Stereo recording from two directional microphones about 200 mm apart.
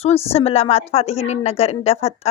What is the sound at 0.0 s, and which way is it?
A woman's voice, 30° left (ahead or behind).